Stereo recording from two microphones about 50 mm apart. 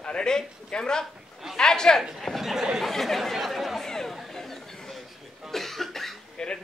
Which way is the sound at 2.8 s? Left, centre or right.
Centre.